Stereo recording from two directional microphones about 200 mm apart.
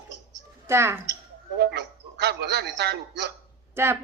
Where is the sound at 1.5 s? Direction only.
60° right (ahead or behind).